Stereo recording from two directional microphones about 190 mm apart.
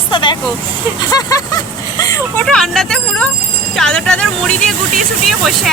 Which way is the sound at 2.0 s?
15° left (ahead or behind).